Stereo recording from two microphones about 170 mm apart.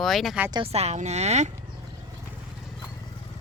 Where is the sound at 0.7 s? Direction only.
40° right (ahead or behind).